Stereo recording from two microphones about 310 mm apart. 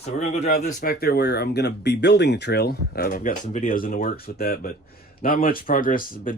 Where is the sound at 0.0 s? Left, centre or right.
Left.